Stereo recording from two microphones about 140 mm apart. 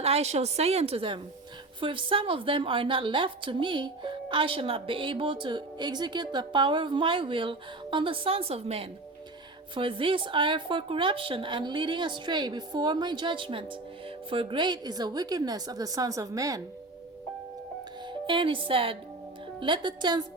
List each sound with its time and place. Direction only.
0.0 s a woman's voice: 50° right (ahead or behind); by 16.6 s 25° right (ahead or behind)
18.3 s a woman's voice: 35° right (ahead or behind)